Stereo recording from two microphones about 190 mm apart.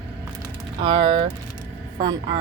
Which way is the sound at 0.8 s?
25° right (ahead or behind).